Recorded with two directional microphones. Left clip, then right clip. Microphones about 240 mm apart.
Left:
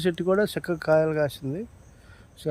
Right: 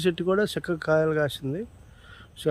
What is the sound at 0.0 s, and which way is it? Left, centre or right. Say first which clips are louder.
Speech: left 1 dB; centre.